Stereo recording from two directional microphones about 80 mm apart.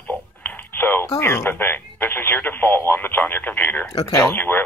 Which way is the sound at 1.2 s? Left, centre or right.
Left.